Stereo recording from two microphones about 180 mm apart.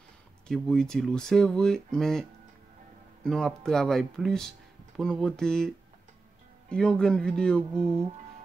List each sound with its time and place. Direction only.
0.5 s speech: 5° left (ahead or behind)
3.3 s speech: centre (ahead or behind)
6.7 s speech: 5° left (ahead or behind)